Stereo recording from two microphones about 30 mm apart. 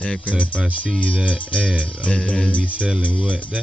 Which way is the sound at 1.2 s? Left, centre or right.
Left.